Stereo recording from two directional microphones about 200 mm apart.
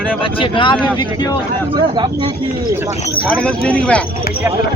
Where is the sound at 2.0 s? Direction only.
20° right (ahead or behind).